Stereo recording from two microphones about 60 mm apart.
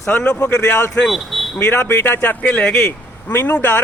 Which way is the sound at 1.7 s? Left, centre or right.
Left.